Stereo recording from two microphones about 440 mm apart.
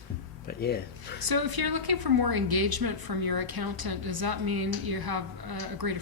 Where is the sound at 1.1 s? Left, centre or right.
Right.